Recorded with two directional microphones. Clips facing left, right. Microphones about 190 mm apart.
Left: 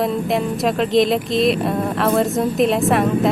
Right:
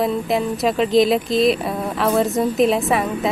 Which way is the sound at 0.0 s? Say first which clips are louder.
Even; centre (ahead or behind).